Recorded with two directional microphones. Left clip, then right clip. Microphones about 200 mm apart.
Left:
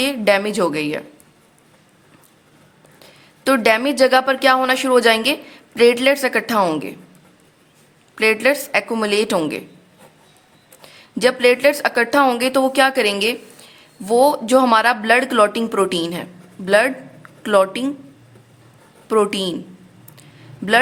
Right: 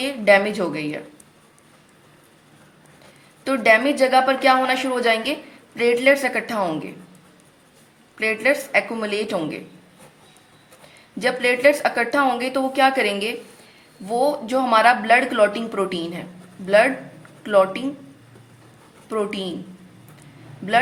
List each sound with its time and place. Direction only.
0.0 s a woman's voice: 40° left (ahead or behind)
3.4 s a woman's voice: 40° left (ahead or behind)
8.1 s a woman's voice: 40° left (ahead or behind)
11.2 s a woman's voice: 40° left (ahead or behind)
19.0 s a woman's voice: 45° left (ahead or behind)